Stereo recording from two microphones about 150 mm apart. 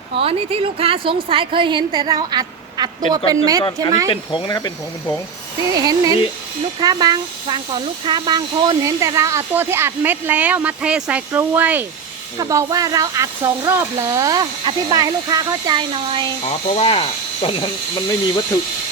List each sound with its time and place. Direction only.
0.1 s a woman's voice: 40° right (ahead or behind); by 4.1 s 20° right (ahead or behind)
4.1 s speech: 35° left (ahead or behind)
5.7 s a woman's voice: 25° right (ahead or behind)
12.4 s speech: 25° right (ahead or behind)
16.5 s speech: 45° left (ahead or behind)